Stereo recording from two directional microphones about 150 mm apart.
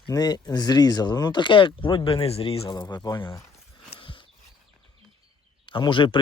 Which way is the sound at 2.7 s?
25° left (ahead or behind).